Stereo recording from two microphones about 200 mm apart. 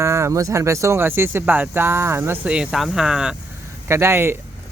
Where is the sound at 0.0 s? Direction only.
15° right (ahead or behind).